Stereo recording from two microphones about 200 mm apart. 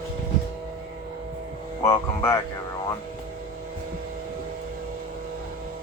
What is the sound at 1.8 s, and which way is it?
Speech, 10° left (ahead or behind).